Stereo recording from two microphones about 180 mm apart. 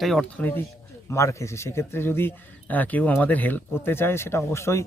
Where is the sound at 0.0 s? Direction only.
5° left (ahead or behind).